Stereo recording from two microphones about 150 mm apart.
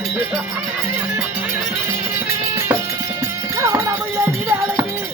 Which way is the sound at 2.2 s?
15° right (ahead or behind).